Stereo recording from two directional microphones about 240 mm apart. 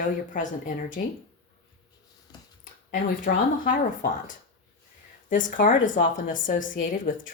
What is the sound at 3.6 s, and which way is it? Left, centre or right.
Speech, left.